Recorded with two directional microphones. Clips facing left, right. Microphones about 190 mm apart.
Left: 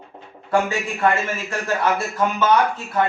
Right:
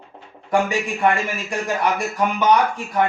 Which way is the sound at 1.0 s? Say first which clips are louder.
Left 1 dB; 15° right (ahead or behind).